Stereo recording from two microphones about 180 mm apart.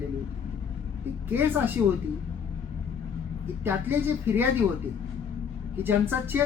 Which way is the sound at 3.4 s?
10° right (ahead or behind).